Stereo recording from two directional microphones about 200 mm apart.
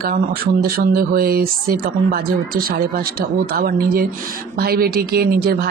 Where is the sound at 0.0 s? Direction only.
45° right (ahead or behind).